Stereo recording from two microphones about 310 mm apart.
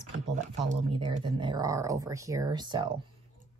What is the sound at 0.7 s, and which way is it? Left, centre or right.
Speech, centre.